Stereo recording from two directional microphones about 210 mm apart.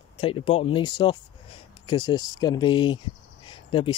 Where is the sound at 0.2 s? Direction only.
25° left (ahead or behind).